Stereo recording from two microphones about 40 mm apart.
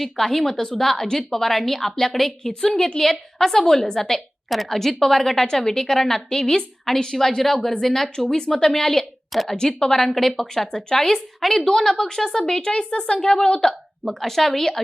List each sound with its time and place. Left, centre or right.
0.0 s a woman's voice: centre
12.6 s a woman's voice: left
14.2 s a woman's voice: centre